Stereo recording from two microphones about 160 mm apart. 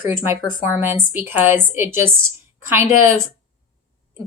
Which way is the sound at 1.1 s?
10° right (ahead or behind).